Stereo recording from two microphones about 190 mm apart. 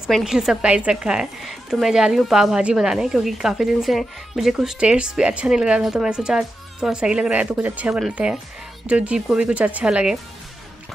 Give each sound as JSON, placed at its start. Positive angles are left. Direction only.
{"t": 0.1, "sound": "a woman's voice", "side_deg": 0}